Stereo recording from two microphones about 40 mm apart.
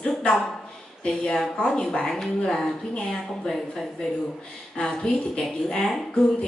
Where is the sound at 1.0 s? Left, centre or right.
Centre.